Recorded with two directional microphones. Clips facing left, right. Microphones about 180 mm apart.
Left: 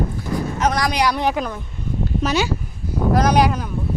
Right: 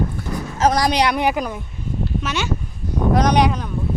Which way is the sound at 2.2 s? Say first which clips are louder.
Left 5 dB; 35° left (ahead or behind).